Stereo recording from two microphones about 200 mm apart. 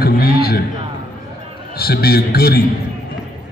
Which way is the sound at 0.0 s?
50° left (ahead or behind).